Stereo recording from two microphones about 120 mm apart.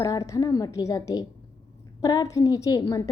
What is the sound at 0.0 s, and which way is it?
A woman's voice, 30° left (ahead or behind).